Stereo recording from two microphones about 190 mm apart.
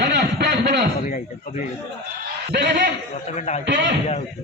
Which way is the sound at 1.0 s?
45° left (ahead or behind).